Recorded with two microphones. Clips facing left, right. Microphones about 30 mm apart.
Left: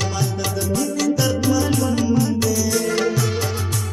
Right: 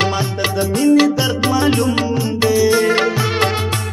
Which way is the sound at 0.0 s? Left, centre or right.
Right.